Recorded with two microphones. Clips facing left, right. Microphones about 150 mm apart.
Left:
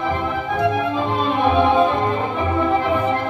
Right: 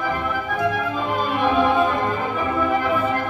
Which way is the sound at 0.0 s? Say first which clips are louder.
Left 2 dB; 25° left (ahead or behind).